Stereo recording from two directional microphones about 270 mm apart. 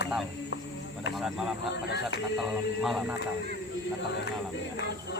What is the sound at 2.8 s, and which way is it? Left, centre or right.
Speech, centre.